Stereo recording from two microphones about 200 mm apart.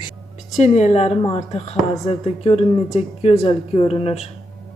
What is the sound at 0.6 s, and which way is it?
Speech, 35° left (ahead or behind).